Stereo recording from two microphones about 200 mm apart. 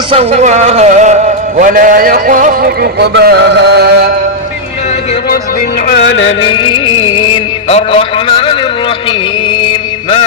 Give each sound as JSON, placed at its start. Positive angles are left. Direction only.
{"t": 0.1, "sound": "speech", "side_deg": -30}
{"t": 3.1, "sound": "music", "side_deg": -55}
{"t": 5.9, "sound": "music", "side_deg": 65}
{"t": 6.5, "sound": "music", "side_deg": 25}
{"t": 7.2, "sound": "mantra", "side_deg": 25}